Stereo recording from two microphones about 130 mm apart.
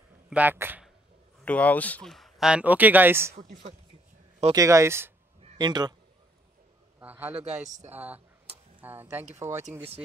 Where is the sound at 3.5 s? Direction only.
70° right (ahead or behind).